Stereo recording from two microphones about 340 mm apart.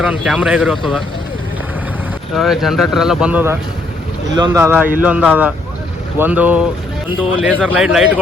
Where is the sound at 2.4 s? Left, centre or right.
Centre.